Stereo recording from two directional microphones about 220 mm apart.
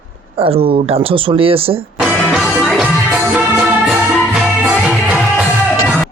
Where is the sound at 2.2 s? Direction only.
Centre (ahead or behind).